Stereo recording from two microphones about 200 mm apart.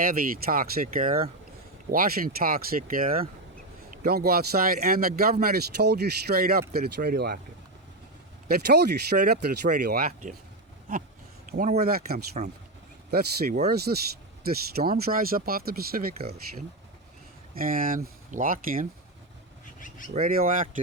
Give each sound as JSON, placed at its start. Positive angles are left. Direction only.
{"t": 0.0, "sound": "a man's voice", "side_deg": -45}
{"t": 8.4, "sound": "a man's voice", "side_deg": -55}
{"t": 11.5, "sound": "a man's voice", "side_deg": -40}
{"t": 20.1, "sound": "a man's voice", "side_deg": -45}